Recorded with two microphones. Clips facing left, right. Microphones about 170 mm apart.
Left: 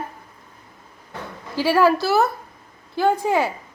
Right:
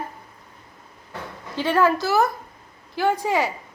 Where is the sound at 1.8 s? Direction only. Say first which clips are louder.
Left 2 dB; 20° right (ahead or behind).